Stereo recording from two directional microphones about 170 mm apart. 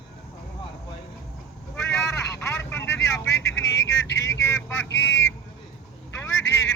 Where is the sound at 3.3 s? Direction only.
90° left.